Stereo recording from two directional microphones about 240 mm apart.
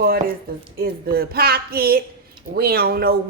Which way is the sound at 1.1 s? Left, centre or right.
Right.